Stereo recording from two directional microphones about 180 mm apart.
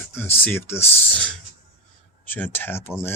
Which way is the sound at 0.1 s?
10° left (ahead or behind).